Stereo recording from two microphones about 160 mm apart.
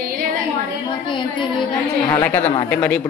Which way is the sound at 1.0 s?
30° left (ahead or behind).